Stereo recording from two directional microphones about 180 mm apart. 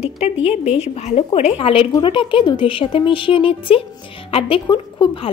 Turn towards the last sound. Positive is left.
turn(degrees=30)  # may be behind; listen again after turning